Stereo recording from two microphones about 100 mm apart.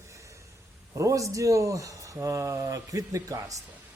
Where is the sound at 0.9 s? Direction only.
30° right (ahead or behind).